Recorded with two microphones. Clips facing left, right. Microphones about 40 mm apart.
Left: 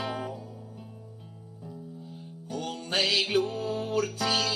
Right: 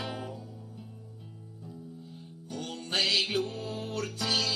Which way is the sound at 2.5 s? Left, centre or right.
Centre.